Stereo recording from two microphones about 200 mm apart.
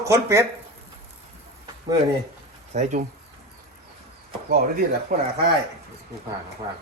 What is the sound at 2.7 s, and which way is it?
Speech, 40° right (ahead or behind).